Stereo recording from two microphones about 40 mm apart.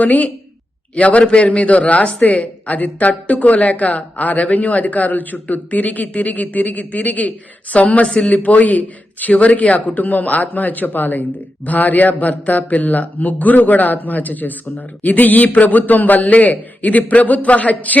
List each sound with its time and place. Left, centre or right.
0.0 s speech: left
8.0 s a man's voice: left
8.3 s a man's voice: left